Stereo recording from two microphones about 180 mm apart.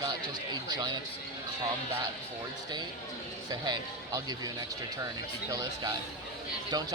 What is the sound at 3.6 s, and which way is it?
Speech, 20° right (ahead or behind).